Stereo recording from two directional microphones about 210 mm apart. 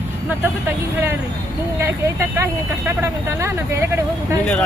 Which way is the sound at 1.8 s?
10° right (ahead or behind).